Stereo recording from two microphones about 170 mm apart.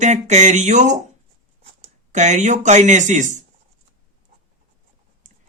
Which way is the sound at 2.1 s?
45° right (ahead or behind).